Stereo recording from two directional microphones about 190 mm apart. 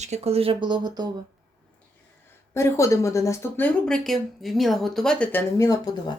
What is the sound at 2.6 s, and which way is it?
Speech, 15° left (ahead or behind).